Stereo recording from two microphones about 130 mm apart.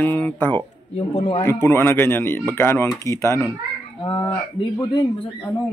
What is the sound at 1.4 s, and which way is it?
Speech, 20° left (ahead or behind).